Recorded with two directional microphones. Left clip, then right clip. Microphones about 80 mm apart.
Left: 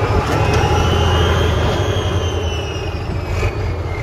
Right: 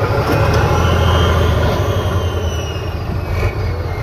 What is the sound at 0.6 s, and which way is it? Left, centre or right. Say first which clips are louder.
Train: right 1 dB; left.